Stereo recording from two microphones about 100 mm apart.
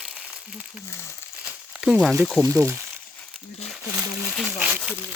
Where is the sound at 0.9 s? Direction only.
25° left (ahead or behind).